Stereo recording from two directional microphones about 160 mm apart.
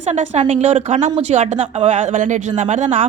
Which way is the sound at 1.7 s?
35° right (ahead or behind).